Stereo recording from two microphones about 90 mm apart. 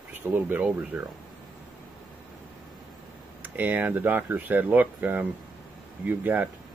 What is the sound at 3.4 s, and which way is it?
Speech, 20° right (ahead or behind).